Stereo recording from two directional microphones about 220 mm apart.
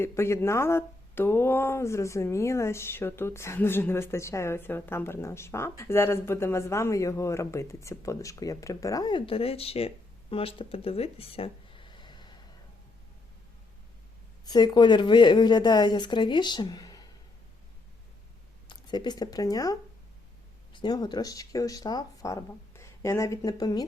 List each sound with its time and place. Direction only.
0.0 s speech: 10° left (ahead or behind)
14.4 s a woman's voice: 20° left (ahead or behind)
18.7 s speech: 20° left (ahead or behind)
20.7 s speech: 20° left (ahead or behind)